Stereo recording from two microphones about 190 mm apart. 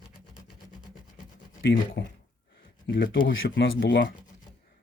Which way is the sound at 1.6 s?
75° left (ahead or behind).